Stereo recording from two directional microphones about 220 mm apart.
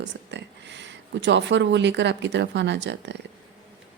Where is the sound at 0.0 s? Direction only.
55° right (ahead or behind).